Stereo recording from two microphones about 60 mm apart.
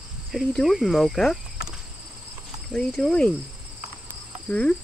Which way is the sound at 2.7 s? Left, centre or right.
Centre.